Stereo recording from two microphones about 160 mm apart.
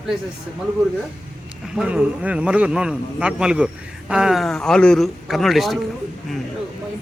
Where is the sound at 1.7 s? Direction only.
5° right (ahead or behind).